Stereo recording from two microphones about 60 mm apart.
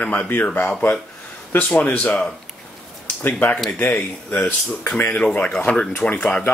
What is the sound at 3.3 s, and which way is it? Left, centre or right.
Speech, left.